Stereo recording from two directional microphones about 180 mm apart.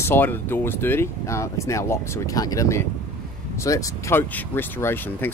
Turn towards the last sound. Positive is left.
turn(degrees=10)  # may be behind; listen again after turning